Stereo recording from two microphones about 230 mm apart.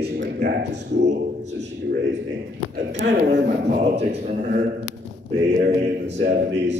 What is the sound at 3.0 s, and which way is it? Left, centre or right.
Speech, right.